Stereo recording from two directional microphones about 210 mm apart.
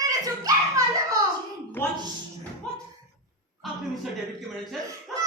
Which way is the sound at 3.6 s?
Centre (ahead or behind).